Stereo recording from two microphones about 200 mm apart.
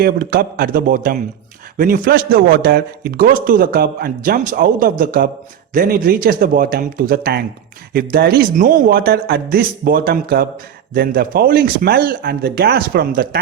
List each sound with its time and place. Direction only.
0.0 s a man's voice: 50° right (ahead or behind)